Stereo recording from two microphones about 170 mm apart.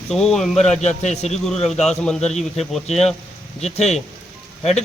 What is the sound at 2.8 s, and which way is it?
Speech, 40° left (ahead or behind).